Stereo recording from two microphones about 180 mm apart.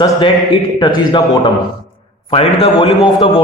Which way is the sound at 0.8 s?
25° left (ahead or behind).